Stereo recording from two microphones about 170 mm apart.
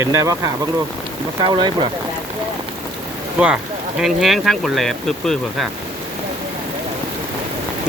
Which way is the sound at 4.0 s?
Centre (ahead or behind).